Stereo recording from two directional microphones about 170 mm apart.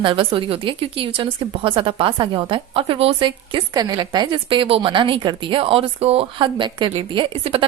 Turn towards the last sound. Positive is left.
turn(degrees=-30)  # may be behind; listen again after turning